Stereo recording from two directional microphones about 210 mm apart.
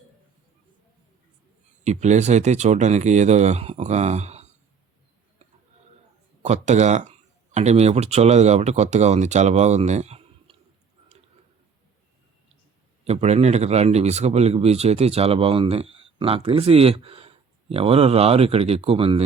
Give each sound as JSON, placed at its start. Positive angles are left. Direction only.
{"t": 1.8, "sound": "speech", "side_deg": -35}
{"t": 6.4, "sound": "speech", "side_deg": -35}
{"t": 13.1, "sound": "speech", "side_deg": -30}